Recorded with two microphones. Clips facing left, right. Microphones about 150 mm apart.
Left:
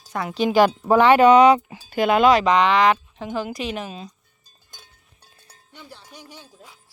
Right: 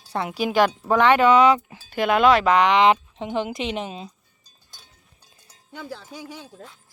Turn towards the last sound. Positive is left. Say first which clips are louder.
# right 6 dB
turn(degrees=-80)